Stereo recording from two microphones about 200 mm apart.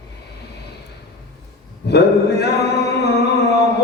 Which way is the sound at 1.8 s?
55° left (ahead or behind).